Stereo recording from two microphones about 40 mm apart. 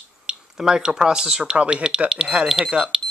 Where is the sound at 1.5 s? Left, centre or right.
Right.